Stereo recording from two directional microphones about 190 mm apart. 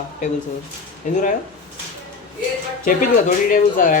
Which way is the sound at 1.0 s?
45° left (ahead or behind).